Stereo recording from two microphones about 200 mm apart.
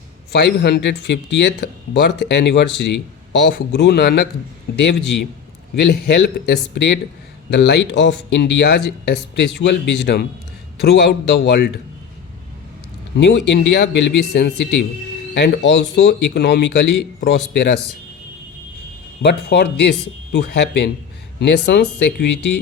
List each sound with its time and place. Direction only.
0.3 s speech: 55° left (ahead or behind)
5.7 s speech: 55° left (ahead or behind)
13.1 s speech: 60° left (ahead or behind)
19.2 s speech: 55° left (ahead or behind)